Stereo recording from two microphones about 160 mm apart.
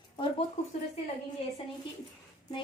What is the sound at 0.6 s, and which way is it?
Speech, 45° left (ahead or behind).